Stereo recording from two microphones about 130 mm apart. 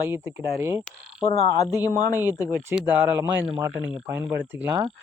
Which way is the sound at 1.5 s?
30° left (ahead or behind).